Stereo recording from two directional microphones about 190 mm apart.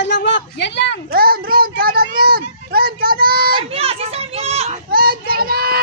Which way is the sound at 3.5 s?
30° right (ahead or behind).